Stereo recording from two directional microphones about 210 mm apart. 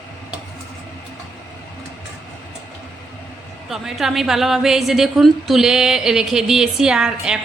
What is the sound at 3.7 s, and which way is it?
A woman's voice, centre (ahead or behind).